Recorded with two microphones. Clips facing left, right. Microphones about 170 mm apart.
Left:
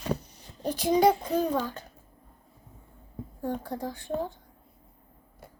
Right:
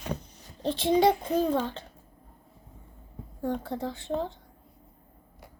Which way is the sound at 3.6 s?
20° right (ahead or behind).